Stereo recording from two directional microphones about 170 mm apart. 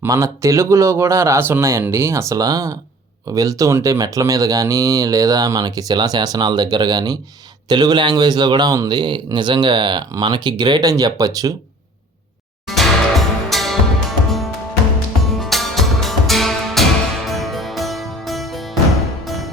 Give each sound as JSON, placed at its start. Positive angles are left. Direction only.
{"t": 0.0, "sound": "speech", "side_deg": -20}
{"t": 12.6, "sound": "music", "side_deg": 0}